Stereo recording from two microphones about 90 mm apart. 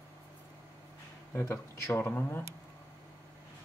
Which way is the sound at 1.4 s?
25° left (ahead or behind).